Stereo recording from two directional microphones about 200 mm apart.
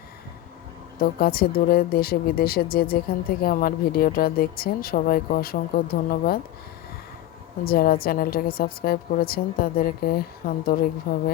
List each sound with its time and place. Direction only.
0.9 s a woman's voice: 50° left (ahead or behind)
7.6 s a woman's voice: 50° left (ahead or behind)